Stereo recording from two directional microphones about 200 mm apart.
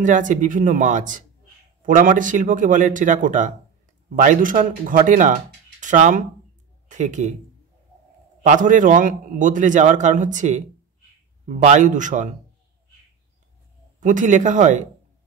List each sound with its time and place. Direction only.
0.0 s a man's voice: 40° right (ahead or behind)
8.4 s a man's voice: 40° right (ahead or behind)
13.9 s a man's voice: 40° right (ahead or behind)